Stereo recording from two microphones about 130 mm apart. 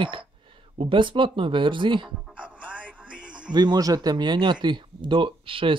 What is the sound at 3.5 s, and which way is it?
Speech, 35° right (ahead or behind).